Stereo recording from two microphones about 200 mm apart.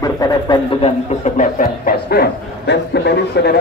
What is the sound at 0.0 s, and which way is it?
Speech, 20° left (ahead or behind).